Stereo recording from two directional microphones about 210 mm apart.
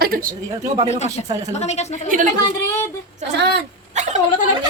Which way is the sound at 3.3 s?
50° right (ahead or behind).